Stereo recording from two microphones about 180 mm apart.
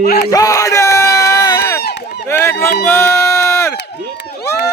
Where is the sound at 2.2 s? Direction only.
15° left (ahead or behind).